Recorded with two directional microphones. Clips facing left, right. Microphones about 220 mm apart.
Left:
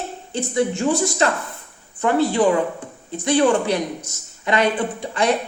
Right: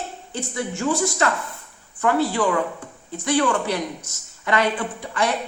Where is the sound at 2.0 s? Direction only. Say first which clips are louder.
Left 3 dB; 20° left (ahead or behind).